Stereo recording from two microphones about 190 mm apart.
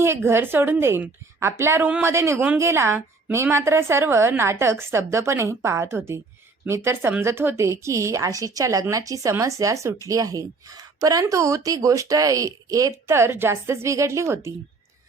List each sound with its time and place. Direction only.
0.0 s a woman's voice: 10° right (ahead or behind)